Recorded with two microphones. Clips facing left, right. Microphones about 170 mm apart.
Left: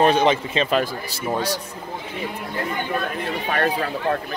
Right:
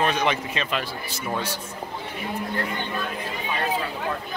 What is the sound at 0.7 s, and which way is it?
Speech, 40° left (ahead or behind).